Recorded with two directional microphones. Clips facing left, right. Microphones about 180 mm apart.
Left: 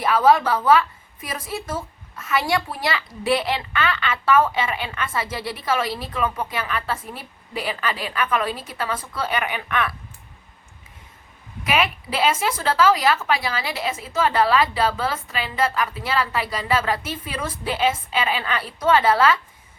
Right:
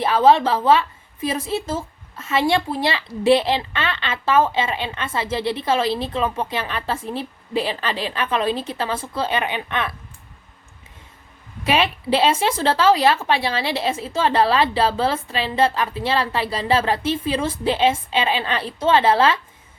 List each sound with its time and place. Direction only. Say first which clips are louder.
0.0 s a woman's voice: right 2 dB; 30° right (ahead or behind)
11.6 s a woman's voice: right 3 dB; 30° right (ahead or behind)